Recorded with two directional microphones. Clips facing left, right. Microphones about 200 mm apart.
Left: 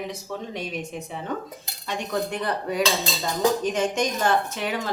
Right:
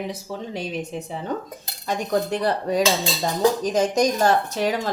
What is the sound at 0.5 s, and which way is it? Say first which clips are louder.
Speech: right 3 dB; 30° right (ahead or behind).